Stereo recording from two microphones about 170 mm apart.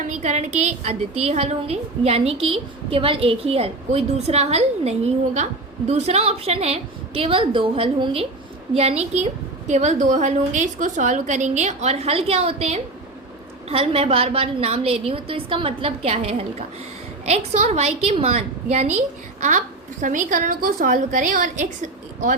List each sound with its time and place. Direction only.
0.0 s a woman's voice: 45° right (ahead or behind)